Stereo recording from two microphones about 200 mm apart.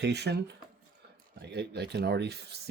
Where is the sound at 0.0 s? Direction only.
55° right (ahead or behind).